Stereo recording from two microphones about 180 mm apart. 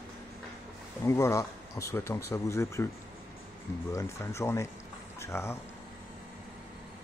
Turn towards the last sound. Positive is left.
turn(degrees=15)  # may be behind; listen again after turning